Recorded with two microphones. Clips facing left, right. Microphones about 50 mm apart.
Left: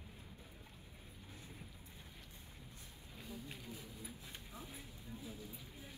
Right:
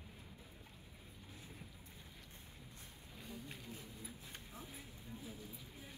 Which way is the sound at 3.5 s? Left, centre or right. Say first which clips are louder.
Left 1 dB; right.